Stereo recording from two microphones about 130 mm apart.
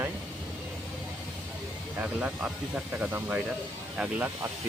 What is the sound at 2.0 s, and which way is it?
Speech, 5° right (ahead or behind).